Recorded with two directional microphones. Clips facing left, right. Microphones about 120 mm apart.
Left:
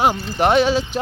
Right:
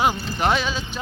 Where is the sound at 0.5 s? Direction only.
75° left (ahead or behind).